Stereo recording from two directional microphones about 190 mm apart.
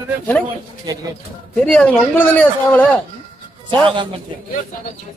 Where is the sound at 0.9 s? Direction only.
20° right (ahead or behind).